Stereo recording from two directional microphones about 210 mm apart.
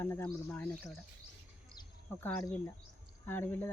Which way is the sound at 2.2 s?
10° left (ahead or behind).